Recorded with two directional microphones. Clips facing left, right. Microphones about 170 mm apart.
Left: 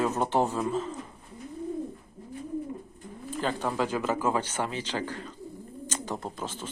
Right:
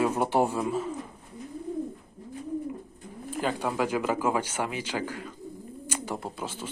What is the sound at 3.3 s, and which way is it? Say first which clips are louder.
Speech: right 1 dB; 10° right (ahead or behind).